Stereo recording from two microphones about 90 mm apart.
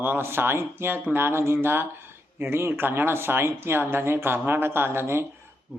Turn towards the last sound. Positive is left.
turn(degrees=-25)  # may be behind; listen again after turning